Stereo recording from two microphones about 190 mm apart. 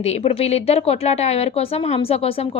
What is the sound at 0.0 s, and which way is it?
A woman's voice, 35° left (ahead or behind).